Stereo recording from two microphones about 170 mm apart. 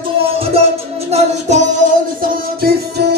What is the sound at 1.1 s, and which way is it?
Music, 40° right (ahead or behind).